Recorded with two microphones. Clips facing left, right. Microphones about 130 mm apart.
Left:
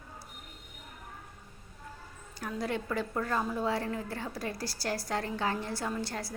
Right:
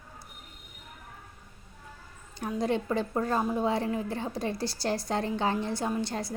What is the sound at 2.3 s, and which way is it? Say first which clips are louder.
A woman's voice: right 5 dB; 20° right (ahead or behind).